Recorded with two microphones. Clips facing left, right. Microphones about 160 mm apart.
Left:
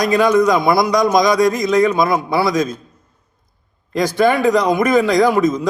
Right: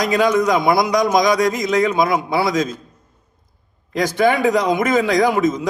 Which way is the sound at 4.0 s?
20° right (ahead or behind).